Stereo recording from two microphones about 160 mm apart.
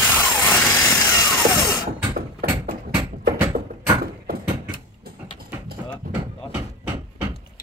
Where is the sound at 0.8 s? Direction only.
5° left (ahead or behind).